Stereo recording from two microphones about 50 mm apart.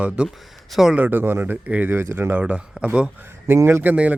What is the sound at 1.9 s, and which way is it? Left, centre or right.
Speech, right.